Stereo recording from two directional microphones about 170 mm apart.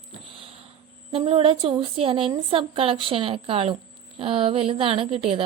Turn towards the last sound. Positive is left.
turn(degrees=-30)  # may be behind; listen again after turning